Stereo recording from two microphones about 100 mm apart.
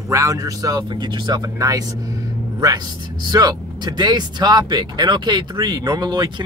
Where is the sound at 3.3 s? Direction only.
45° right (ahead or behind).